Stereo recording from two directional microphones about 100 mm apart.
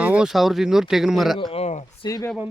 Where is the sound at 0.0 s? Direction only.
10° right (ahead or behind).